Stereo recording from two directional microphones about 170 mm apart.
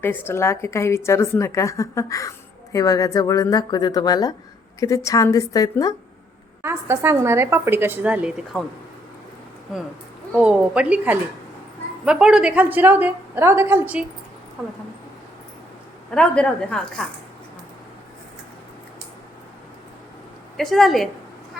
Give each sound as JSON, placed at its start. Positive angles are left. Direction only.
{"t": 0.0, "sound": "a woman's voice", "side_deg": 10}
{"t": 6.6, "sound": "a woman's voice", "side_deg": -15}
{"t": 10.3, "sound": "a woman's voice", "side_deg": -5}
{"t": 16.1, "sound": "a woman's voice", "side_deg": 5}
{"t": 20.6, "sound": "a woman's voice", "side_deg": 0}